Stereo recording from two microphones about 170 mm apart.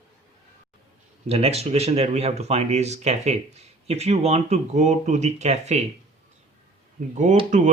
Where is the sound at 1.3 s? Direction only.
35° right (ahead or behind).